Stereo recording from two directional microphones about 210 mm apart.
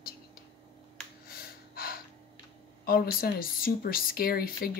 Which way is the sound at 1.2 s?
45° left (ahead or behind).